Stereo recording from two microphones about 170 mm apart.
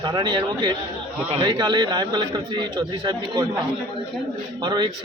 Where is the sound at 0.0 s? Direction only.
25° right (ahead or behind).